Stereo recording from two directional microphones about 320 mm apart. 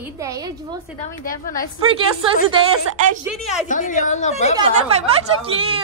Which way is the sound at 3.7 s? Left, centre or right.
Left.